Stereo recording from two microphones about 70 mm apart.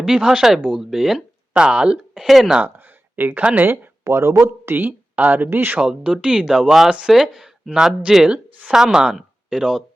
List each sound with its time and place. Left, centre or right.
0.0 s speech: centre
2.6 s a sound: right
3.4 s speech: right
3.7 s speech: right
5.8 s speech: centre